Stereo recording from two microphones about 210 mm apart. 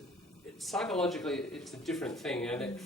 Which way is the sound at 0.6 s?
Centre (ahead or behind).